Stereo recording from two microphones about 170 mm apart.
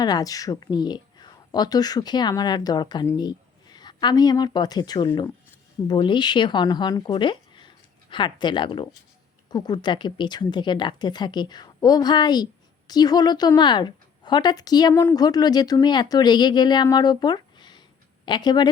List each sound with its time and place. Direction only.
0.0 s a woman's voice: 20° left (ahead or behind)